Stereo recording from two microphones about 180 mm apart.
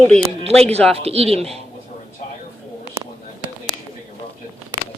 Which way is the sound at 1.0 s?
35° right (ahead or behind).